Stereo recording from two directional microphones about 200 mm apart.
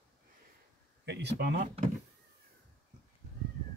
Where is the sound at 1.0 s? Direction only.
60° right (ahead or behind).